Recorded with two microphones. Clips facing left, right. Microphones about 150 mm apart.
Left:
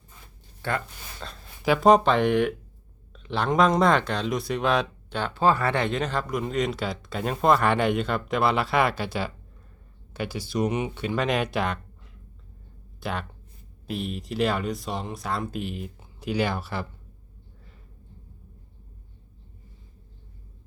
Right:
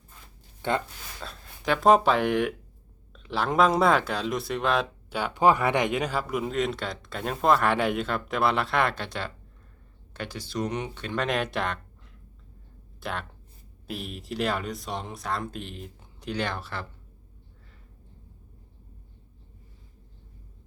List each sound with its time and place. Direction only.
0.6 s speech: 20° right (ahead or behind)
1.2 s speech: centre (ahead or behind)
13.0 s speech: centre (ahead or behind)